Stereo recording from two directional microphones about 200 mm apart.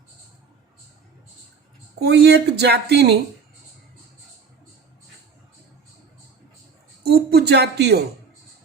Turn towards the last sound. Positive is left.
turn(degrees=-55)  # may be behind; listen again after turning